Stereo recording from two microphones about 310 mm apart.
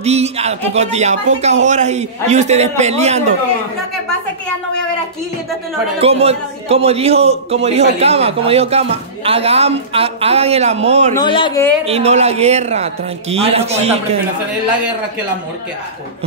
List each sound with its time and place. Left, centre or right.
0.0 s a man's voice: centre
5.9 s a man's voice: centre
11.1 s speech: centre
11.8 s a man's voice: centre